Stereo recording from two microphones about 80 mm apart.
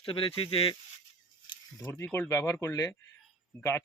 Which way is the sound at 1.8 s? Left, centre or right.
Left.